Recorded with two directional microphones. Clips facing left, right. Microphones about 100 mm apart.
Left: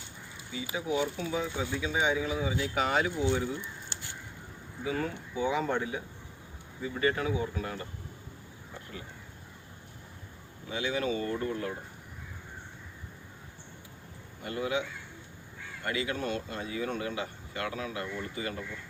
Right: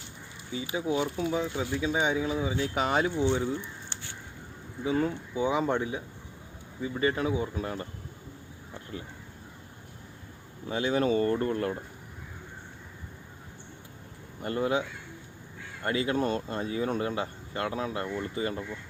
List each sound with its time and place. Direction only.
0.5 s speech: 25° right (ahead or behind)
4.8 s speech: 25° right (ahead or behind)
10.7 s speech: 40° right (ahead or behind)
14.4 s speech: 40° right (ahead or behind)
15.8 s speech: 35° right (ahead or behind)